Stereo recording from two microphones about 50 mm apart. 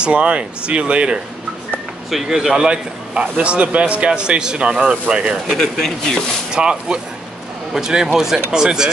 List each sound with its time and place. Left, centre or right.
0.0 s a man's voice: right
2.0 s a man's voice: centre
5.6 s speech: centre
6.5 s speech: centre